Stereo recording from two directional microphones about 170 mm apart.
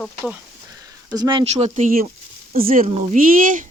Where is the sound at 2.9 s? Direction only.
40° right (ahead or behind).